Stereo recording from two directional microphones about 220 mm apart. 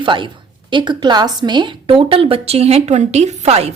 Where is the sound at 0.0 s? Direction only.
20° right (ahead or behind).